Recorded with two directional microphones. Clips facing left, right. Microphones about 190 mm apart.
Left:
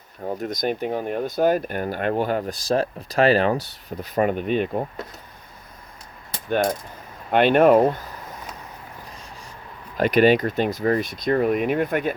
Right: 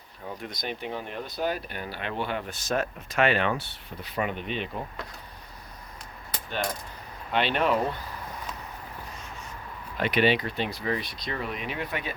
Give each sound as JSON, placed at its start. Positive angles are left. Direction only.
{"t": 0.3, "sound": "speech", "side_deg": 45}
{"t": 6.5, "sound": "speech", "side_deg": 50}
{"t": 10.0, "sound": "speech", "side_deg": 45}